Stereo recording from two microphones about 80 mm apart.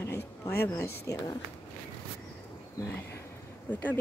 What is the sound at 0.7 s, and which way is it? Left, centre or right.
Speech, left.